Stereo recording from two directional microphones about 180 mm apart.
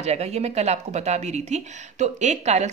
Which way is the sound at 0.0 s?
35° right (ahead or behind).